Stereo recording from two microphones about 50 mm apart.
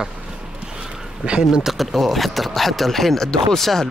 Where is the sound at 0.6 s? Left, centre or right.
Centre.